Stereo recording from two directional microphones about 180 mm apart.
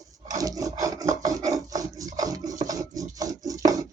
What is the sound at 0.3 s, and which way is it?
Rub, 20° right (ahead or behind).